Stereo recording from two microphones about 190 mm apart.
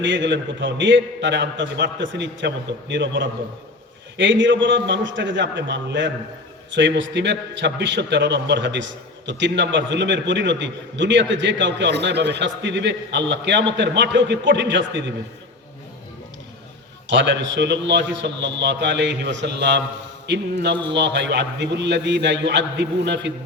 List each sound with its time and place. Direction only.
0.0 s a man's voice: 70° right (ahead or behind)
17.1 s a man's voice: 70° right (ahead or behind)